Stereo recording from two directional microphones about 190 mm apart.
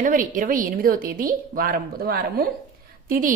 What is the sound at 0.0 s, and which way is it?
A woman's voice, 45° right (ahead or behind).